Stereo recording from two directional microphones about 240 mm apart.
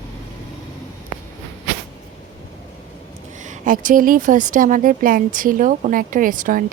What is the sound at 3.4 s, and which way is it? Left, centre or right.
Speech, right.